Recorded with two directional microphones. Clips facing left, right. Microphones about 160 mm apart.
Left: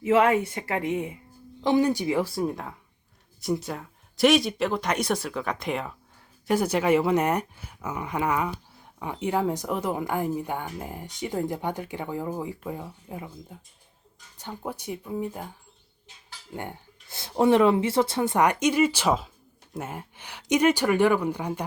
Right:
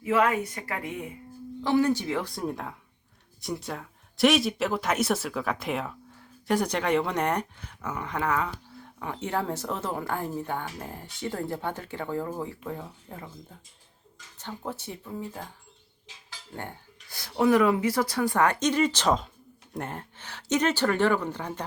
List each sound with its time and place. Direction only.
0.0 s speech: 25° left (ahead or behind)
14.3 s speech: 10° left (ahead or behind)
16.1 s cutlery: 90° right
16.6 s speech: 20° left (ahead or behind)